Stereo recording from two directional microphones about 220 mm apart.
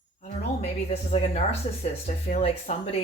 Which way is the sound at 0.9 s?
30° left (ahead or behind).